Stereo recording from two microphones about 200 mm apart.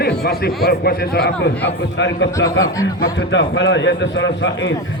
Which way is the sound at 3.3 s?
65° left (ahead or behind).